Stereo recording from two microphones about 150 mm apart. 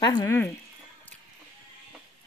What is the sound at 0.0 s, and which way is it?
Speech, 25° left (ahead or behind).